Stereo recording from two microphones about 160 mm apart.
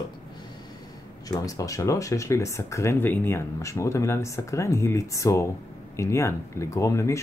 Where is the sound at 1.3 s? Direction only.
20° left (ahead or behind).